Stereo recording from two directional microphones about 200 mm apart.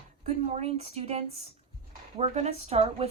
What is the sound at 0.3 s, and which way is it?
A woman's voice, 30° right (ahead or behind).